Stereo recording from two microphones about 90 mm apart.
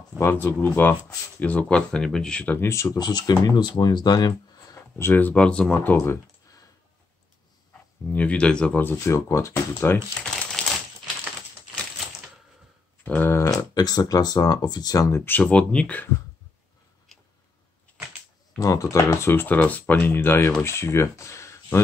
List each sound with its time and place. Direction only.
0.2 s speech: 25° left (ahead or behind); by 2.5 s 10° left (ahead or behind)
2.5 s speech: 30° left (ahead or behind); by 4.3 s 45° left (ahead or behind)
4.7 s speech: 30° left (ahead or behind); by 5.8 s 10° left (ahead or behind)
5.8 s speech: 25° left (ahead or behind)
8.1 s speech: 15° left (ahead or behind)
8.9 s speech: 35° left (ahead or behind)
10.2 s typing: 10° left (ahead or behind)
13.0 s a sound: 20° left (ahead or behind)
13.5 s speech: 45° left (ahead or behind); by 16.1 s 15° left (ahead or behind)
18.6 s speech: 40° left (ahead or behind)